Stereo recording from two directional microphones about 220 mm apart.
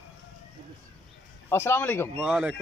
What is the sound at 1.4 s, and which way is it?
Speech, 10° left (ahead or behind).